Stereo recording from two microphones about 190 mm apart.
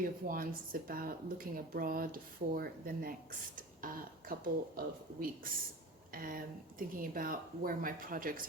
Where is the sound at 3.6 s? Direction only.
45° right (ahead or behind).